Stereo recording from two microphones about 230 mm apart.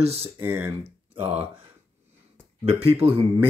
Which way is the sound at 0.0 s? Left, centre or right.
Right.